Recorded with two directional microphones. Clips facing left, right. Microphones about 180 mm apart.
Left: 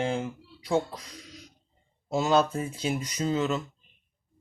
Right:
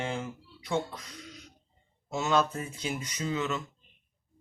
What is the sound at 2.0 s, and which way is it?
Speech, 35° left (ahead or behind).